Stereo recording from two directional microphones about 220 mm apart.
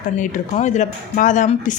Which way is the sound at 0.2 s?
35° left (ahead or behind).